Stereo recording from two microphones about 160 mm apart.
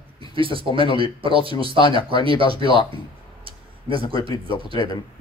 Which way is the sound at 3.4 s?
35° right (ahead or behind).